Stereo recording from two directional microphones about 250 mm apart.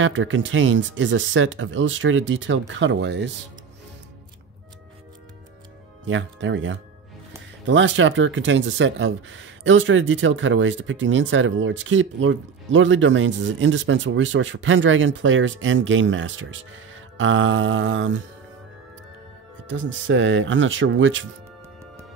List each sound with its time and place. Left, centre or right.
0.0 s speech: right
6.0 s speech: right
19.7 s speech: right